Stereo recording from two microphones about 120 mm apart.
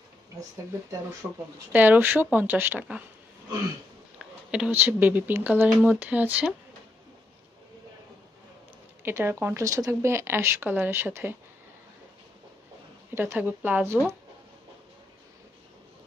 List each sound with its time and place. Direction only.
1.2 s speech: 5° right (ahead or behind)
4.2 s speech: 5° right (ahead or behind)
9.0 s speech: 20° right (ahead or behind)
13.1 s speech: 20° right (ahead or behind)